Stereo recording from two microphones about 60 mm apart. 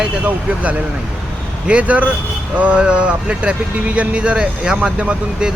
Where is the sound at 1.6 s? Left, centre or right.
Right.